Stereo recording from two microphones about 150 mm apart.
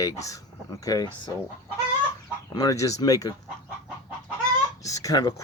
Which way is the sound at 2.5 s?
25° left (ahead or behind).